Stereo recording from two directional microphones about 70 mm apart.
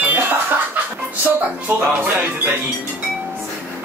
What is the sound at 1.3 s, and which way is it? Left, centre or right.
Speech, right.